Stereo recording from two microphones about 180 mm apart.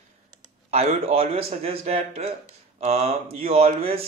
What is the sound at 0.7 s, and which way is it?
Speech, 35° right (ahead or behind).